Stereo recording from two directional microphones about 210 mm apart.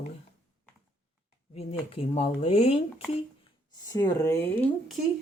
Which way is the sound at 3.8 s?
15° left (ahead or behind).